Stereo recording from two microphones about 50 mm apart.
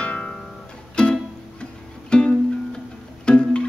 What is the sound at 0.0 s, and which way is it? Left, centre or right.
Music, left.